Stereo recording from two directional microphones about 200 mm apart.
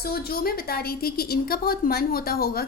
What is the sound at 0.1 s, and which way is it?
A woman's voice, 50° left (ahead or behind).